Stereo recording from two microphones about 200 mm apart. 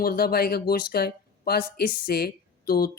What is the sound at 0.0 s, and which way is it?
Speech, 50° left (ahead or behind).